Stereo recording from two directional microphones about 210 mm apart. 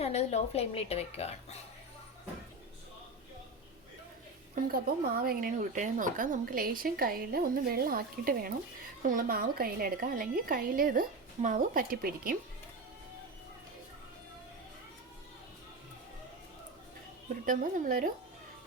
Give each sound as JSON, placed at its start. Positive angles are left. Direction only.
{"t": 0.0, "sound": "speech", "side_deg": 30}
{"t": 4.5, "sound": "speech", "side_deg": -45}
{"t": 17.4, "sound": "a woman's voice", "side_deg": -40}